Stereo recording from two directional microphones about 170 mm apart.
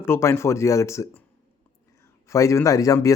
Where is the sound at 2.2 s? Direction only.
20° left (ahead or behind).